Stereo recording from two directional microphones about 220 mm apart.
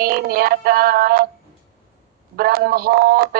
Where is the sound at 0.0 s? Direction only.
40° right (ahead or behind).